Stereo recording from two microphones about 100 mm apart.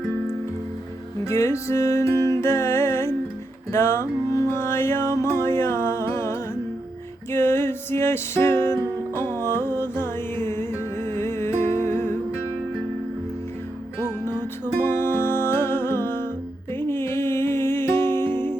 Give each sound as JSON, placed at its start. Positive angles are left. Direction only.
{"t": 1.2, "sound": "music", "side_deg": 30}
{"t": 14.3, "sound": "music", "side_deg": -40}
{"t": 14.8, "sound": "music", "side_deg": 20}